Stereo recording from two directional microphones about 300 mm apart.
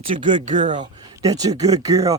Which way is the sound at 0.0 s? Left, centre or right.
Centre.